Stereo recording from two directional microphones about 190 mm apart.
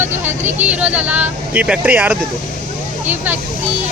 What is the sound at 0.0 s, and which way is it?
Speech, 10° right (ahead or behind).